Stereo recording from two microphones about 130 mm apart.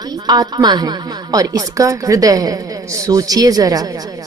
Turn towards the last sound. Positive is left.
turn(degrees=-30)  # may be behind; listen again after turning